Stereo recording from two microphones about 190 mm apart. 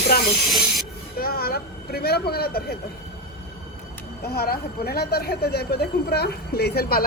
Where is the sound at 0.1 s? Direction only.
50° left (ahead or behind).